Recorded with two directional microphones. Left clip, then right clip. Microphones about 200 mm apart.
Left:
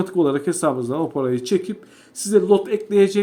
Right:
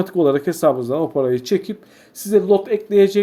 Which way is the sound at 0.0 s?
Centre (ahead or behind).